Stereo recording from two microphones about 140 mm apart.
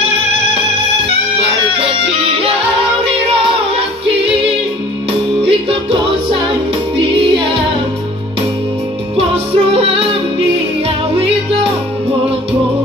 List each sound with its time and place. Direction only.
5.4 s music: 40° right (ahead or behind)
7.0 s music: 35° right (ahead or behind)
9.1 s music: 45° right (ahead or behind)
11.1 s music: 40° right (ahead or behind)